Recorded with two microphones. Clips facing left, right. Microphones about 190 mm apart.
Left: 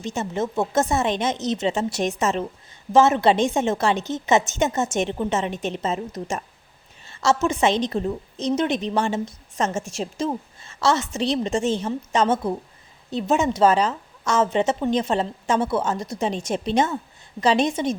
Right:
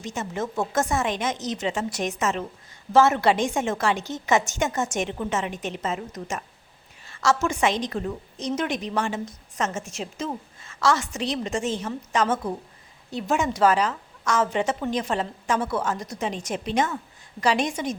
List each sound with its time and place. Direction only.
0.0 s a woman's voice: 25° left (ahead or behind)